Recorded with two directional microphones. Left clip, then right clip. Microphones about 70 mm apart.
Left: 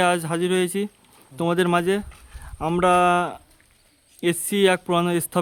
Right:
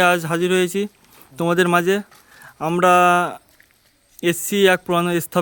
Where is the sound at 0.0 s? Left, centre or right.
Right.